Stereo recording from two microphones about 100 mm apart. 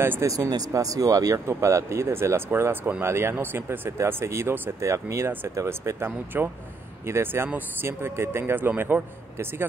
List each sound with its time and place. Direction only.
0.0 s speech: 25° right (ahead or behind)